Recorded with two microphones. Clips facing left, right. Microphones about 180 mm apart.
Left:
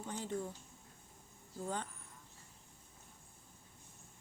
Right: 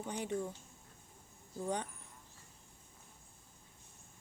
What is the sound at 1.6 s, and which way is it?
Speech, 15° right (ahead or behind).